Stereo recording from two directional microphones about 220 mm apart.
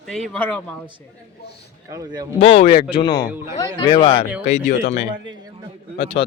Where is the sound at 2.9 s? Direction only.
20° left (ahead or behind).